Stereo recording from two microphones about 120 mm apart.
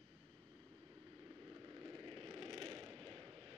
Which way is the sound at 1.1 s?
25° right (ahead or behind).